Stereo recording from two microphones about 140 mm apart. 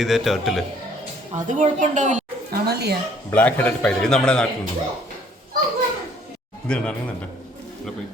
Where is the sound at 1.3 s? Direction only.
60° right (ahead or behind).